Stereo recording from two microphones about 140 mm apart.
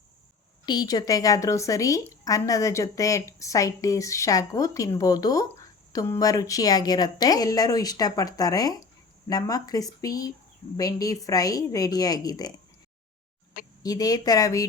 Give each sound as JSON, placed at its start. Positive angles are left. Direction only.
{"t": 0.6, "sound": "a woman's voice", "side_deg": 30}
{"t": 13.8, "sound": "a woman's voice", "side_deg": 25}